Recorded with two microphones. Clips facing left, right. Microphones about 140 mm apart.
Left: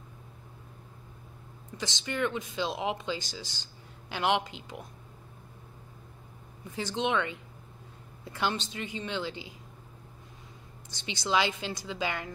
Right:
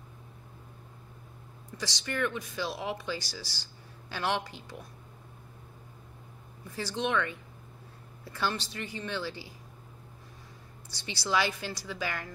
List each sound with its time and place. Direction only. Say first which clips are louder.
1.8 s speech: left 1 dB; 20° left (ahead or behind)
6.7 s speech: left 1 dB; 20° left (ahead or behind)
10.9 s speech: left 1 dB; 20° left (ahead or behind)